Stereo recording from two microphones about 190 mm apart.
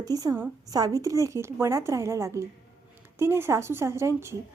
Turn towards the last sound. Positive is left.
turn(degrees=-15)  # may be behind; listen again after turning